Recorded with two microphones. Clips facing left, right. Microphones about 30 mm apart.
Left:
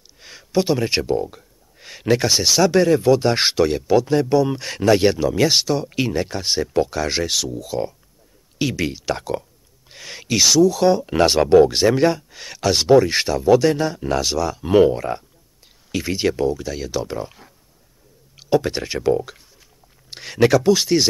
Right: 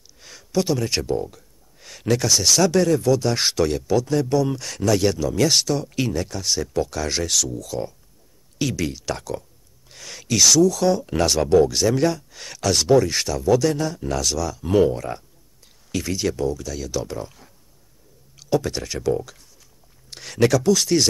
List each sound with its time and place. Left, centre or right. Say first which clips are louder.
0.2 s speech: left 3 dB; left